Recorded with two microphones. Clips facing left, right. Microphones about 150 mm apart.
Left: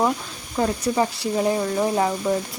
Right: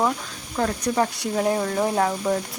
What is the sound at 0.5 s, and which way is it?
Speech, 10° left (ahead or behind).